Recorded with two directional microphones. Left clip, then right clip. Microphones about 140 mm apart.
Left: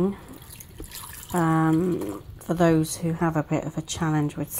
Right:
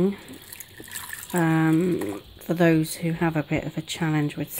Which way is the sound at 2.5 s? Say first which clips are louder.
Even; 10° right (ahead or behind).